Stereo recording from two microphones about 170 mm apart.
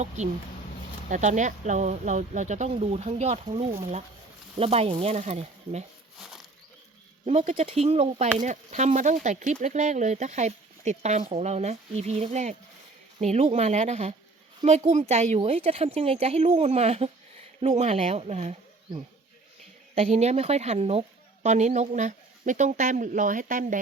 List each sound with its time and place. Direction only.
0.2 s speech: 45° right (ahead or behind)
7.3 s speech: 40° right (ahead or behind)
20.0 s speech: 40° right (ahead or behind)